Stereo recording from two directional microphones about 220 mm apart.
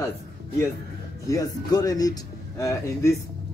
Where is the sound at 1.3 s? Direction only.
15° left (ahead or behind).